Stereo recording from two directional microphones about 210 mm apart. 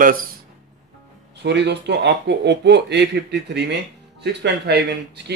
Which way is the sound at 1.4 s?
55° right (ahead or behind).